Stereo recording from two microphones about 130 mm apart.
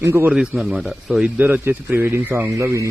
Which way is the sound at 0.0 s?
15° right (ahead or behind).